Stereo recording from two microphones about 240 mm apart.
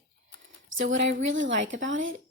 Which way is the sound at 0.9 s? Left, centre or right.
Right.